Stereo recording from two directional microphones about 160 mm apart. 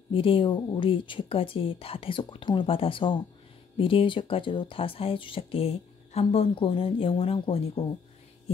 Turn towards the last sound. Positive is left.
turn(degrees=35)  # may be behind; listen again after turning